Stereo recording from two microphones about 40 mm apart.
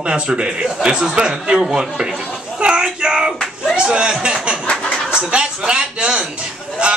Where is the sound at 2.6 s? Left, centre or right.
Right.